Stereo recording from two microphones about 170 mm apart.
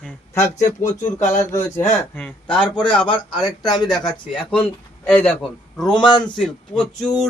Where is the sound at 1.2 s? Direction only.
45° left (ahead or behind).